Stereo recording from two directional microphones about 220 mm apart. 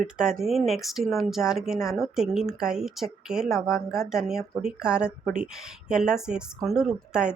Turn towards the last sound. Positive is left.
turn(degrees=-5)  # may be behind; listen again after turning